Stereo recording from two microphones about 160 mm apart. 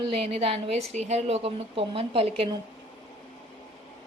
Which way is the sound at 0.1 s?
40° right (ahead or behind).